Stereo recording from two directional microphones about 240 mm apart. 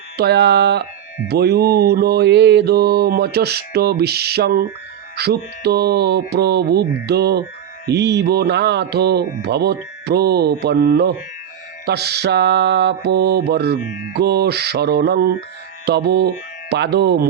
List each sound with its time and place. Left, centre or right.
0.2 s speech: right
1.3 s mantra: right
7.9 s speech: right